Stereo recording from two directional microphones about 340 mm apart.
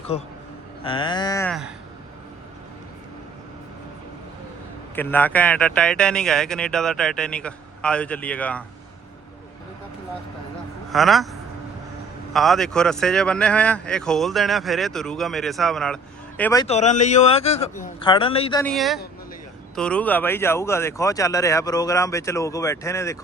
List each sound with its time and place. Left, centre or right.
0.1 s speech: centre
4.9 s speech: centre
10.9 s speech: centre
12.3 s speech: centre
18.6 s speech: centre